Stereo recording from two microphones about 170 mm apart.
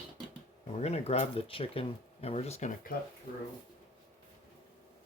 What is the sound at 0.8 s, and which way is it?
Speech, 40° left (ahead or behind).